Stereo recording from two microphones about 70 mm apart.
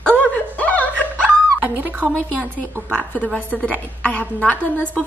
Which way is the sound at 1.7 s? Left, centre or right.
Right.